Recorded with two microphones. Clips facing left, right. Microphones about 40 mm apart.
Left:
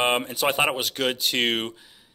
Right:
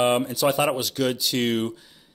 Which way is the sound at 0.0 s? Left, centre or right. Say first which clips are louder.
Right 2 dB; left.